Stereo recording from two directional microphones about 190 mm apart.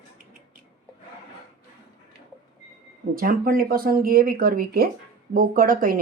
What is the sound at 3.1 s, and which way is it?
Speech, 50° right (ahead or behind).